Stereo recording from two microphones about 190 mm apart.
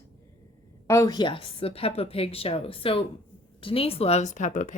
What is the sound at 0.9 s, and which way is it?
A woman's voice, 15° left (ahead or behind).